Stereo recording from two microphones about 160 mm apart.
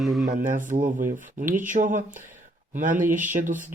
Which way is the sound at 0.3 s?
60° right (ahead or behind).